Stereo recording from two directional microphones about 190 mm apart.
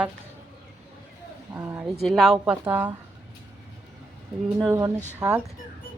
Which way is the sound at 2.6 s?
10° right (ahead or behind).